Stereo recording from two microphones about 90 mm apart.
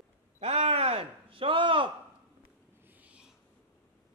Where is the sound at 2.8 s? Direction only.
20° right (ahead or behind).